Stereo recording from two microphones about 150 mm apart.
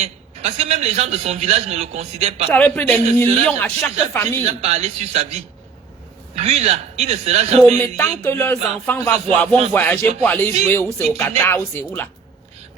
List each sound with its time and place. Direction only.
0.0 s a man's voice: 45° right (ahead or behind)
2.5 s speech: 10° left (ahead or behind)
4.4 s a man's voice: 45° right (ahead or behind)
7.6 s speech: 15° left (ahead or behind)